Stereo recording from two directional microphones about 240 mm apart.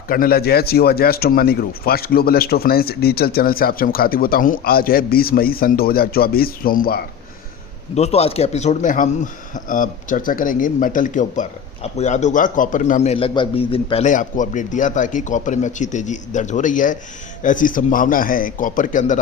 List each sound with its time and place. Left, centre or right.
0.1 s speech: left
7.9 s speech: left